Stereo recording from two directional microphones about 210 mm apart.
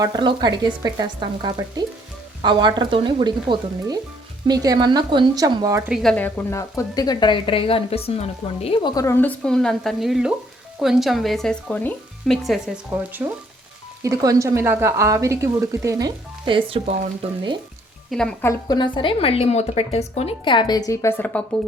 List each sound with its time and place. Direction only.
0.0 s speech: 20° right (ahead or behind)
5.9 s a woman's voice: centre (ahead or behind); by 16.9 s 25° right (ahead or behind)
18.1 s speech: 5° left (ahead or behind)
18.7 s a woman's voice: 20° left (ahead or behind)